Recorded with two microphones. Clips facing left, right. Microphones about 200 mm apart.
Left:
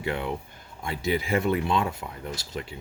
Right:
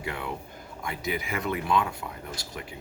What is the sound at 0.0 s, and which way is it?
Speech, 25° left (ahead or behind).